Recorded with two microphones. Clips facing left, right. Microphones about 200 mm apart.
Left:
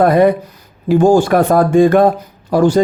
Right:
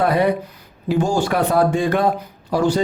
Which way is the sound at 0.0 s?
50° left (ahead or behind).